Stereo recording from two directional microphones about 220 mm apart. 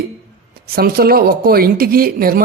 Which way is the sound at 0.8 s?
45° right (ahead or behind).